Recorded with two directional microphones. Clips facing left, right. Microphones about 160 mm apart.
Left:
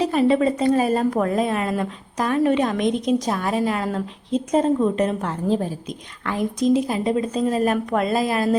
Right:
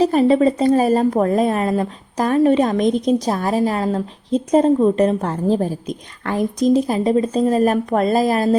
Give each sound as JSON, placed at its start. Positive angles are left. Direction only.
{"t": 0.0, "sound": "a woman's voice", "side_deg": -40}